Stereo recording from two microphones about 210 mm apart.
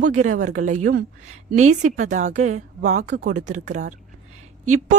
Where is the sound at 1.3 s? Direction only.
90° right.